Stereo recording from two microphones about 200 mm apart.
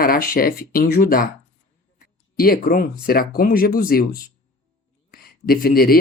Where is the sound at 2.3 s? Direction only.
45° left (ahead or behind).